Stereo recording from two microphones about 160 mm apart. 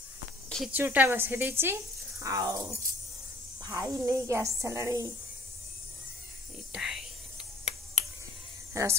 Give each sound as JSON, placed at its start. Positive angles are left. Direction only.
{"t": 0.7, "sound": "speech", "side_deg": -10}
{"t": 6.7, "sound": "whispering", "side_deg": 0}
{"t": 8.8, "sound": "speech", "side_deg": -20}